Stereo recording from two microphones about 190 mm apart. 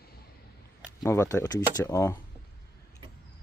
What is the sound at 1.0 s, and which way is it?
Speech, 15° left (ahead or behind).